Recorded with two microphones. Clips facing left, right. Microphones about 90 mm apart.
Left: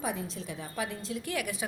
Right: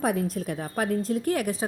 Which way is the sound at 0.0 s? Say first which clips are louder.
Right 9 dB; 55° right (ahead or behind).